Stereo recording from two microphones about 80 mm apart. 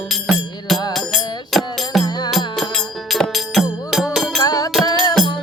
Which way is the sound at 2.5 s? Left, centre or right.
Centre.